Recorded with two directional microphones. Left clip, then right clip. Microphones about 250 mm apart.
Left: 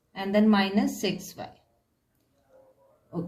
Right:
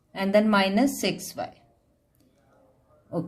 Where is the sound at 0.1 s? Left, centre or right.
Right.